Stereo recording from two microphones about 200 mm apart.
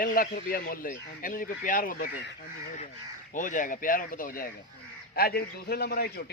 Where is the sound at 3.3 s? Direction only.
40° left (ahead or behind).